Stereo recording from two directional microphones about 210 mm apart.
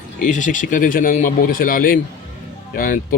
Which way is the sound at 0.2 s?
35° left (ahead or behind).